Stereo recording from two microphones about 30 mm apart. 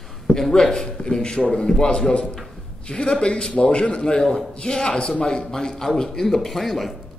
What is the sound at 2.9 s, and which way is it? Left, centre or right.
A man's voice, left.